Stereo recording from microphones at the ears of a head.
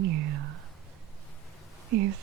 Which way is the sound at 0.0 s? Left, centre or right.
Right.